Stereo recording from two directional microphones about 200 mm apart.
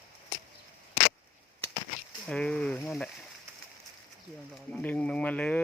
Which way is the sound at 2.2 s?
5° left (ahead or behind).